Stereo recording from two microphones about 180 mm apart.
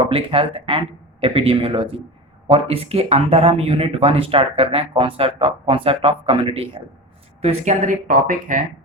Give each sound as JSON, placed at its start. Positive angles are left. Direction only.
{"t": 0.0, "sound": "speech", "side_deg": -30}